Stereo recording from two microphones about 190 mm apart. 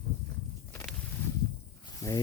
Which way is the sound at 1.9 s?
15° left (ahead or behind).